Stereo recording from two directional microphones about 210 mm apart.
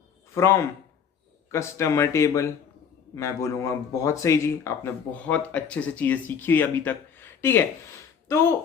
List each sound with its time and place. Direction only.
0.3 s speech: 15° left (ahead or behind)